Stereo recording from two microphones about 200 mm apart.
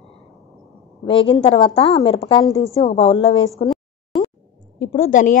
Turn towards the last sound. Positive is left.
turn(degrees=40)  # may be behind; listen again after turning